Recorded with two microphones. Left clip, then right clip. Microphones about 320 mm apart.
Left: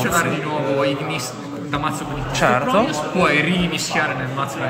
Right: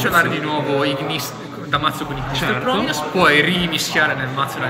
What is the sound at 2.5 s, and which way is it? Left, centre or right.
Speech, centre.